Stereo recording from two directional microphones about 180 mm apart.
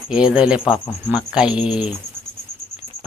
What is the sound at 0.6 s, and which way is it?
Speech, 25° left (ahead or behind).